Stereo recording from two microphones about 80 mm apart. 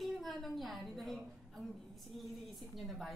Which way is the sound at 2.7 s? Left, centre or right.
Centre.